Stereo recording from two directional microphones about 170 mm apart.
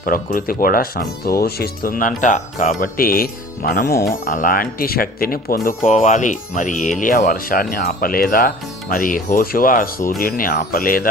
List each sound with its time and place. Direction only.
0.0 s speech: 55° left (ahead or behind)
4.3 s speech: 55° left (ahead or behind)